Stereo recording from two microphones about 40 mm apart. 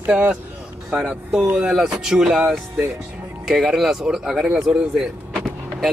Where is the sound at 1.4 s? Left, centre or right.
Right.